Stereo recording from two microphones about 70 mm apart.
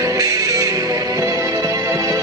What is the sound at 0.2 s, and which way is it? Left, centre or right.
Music, right.